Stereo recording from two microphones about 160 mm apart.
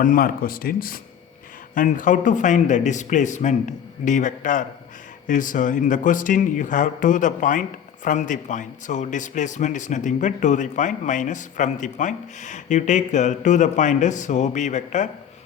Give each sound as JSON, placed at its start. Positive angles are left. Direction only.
{"t": 0.0, "sound": "speech", "side_deg": 60}